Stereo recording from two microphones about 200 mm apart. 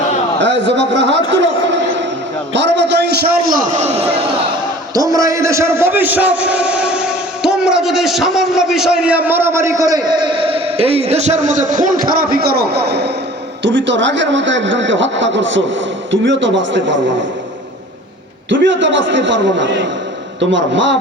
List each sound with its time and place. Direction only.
0.3 s speech: 60° right (ahead or behind)
1.4 s a sound: 60° right (ahead or behind)
3.5 s a man's voice: 40° right (ahead or behind)
4.9 s a man's voice: 15° right (ahead or behind); by 17.0 s 65° right (ahead or behind)
18.4 s a man's voice: 65° right (ahead or behind)